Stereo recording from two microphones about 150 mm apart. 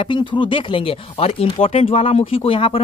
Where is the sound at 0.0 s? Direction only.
30° left (ahead or behind).